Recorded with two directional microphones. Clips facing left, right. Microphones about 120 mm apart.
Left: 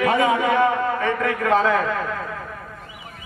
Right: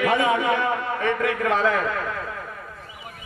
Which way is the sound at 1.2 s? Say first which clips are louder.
Left 3 dB; 35° left (ahead or behind).